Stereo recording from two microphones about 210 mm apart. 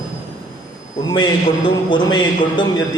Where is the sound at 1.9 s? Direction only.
20° left (ahead or behind).